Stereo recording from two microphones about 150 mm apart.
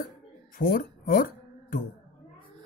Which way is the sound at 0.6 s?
70° left (ahead or behind).